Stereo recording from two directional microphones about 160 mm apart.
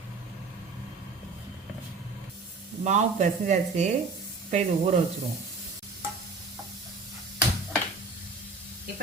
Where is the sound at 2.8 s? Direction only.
50° right (ahead or behind).